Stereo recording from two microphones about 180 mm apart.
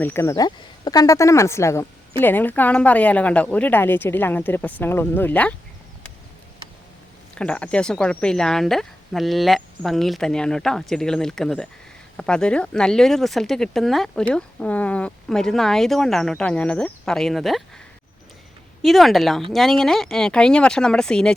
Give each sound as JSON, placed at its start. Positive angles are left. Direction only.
{"t": 0.0, "sound": "speech", "side_deg": 15}
{"t": 7.3, "sound": "speech", "side_deg": 5}
{"t": 18.8, "sound": "speech", "side_deg": 0}